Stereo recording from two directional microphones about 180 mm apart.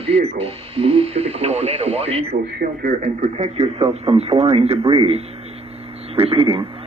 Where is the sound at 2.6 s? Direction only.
50° right (ahead or behind); by 6.6 s 30° right (ahead or behind).